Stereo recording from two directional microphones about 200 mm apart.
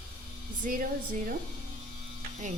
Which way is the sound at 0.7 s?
45° right (ahead or behind).